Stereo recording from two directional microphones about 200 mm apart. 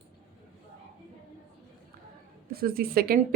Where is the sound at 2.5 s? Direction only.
50° right (ahead or behind).